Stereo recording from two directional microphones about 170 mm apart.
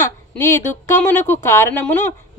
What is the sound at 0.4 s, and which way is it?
Speech, 15° left (ahead or behind).